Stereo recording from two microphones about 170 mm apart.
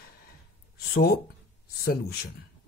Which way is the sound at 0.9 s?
60° left (ahead or behind).